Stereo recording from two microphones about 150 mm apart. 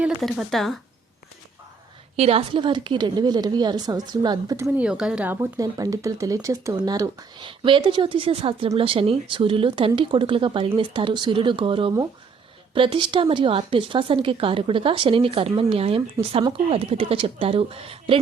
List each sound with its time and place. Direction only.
0.0 s speech: centre (ahead or behind)
2.1 s a woman's voice: 40° right (ahead or behind); by 4.7 s 25° right (ahead or behind)
4.8 s speech: 5° right (ahead or behind); by 18.2 s 40° right (ahead or behind)